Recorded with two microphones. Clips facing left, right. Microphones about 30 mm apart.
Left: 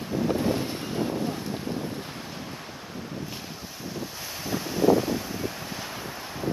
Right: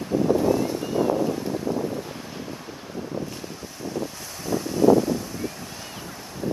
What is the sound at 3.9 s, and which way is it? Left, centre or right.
Wind, centre.